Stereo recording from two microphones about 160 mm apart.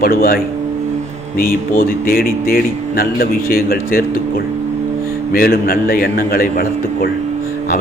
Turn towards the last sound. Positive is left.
turn(degrees=65)  # may be behind; listen again after turning